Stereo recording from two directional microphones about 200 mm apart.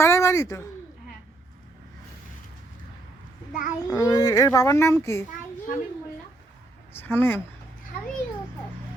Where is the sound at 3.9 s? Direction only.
15° left (ahead or behind).